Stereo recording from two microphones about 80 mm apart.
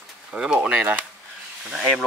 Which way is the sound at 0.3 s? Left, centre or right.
Centre.